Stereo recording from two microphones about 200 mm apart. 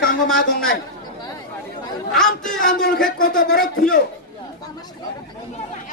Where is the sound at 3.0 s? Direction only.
45° left (ahead or behind).